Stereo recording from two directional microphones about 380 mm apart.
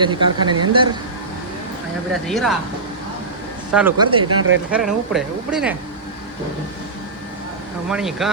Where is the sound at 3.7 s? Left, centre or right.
Centre.